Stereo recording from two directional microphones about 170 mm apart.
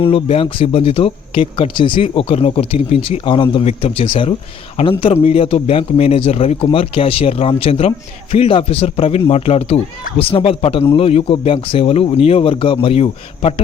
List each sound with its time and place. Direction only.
0.0 s speech: 35° left (ahead or behind)